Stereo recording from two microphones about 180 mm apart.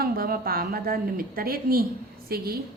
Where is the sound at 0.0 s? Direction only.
55° right (ahead or behind).